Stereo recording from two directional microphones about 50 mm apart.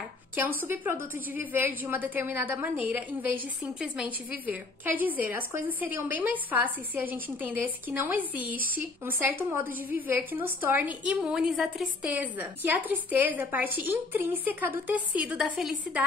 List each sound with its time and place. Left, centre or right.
0.4 s a woman's voice: right
3.8 s speech: right
4.8 s a woman's voice: right
11.1 s a woman's voice: centre
11.5 s a woman's voice: centre
12.0 s a woman's voice: right